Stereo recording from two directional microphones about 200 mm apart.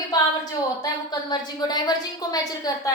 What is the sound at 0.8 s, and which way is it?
A woman's voice, 20° left (ahead or behind).